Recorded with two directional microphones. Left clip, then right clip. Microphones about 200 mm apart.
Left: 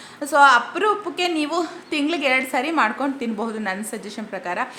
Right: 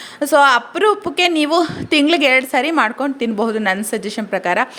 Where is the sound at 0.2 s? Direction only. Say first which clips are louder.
Right 2 dB; 35° right (ahead or behind).